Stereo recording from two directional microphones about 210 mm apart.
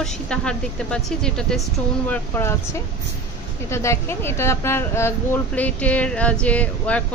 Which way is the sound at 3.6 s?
15° left (ahead or behind).